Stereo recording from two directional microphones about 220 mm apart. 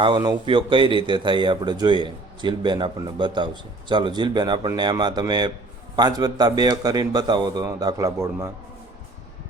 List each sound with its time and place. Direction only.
0.0 s a man's voice: 20° right (ahead or behind)